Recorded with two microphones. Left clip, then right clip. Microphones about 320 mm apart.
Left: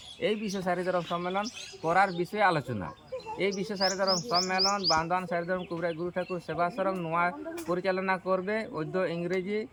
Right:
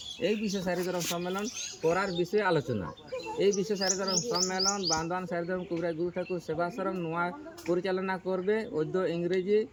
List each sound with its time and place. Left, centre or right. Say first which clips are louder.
0.2 s speech: left 1 dB; centre
3.7 s speech: left 3 dB; centre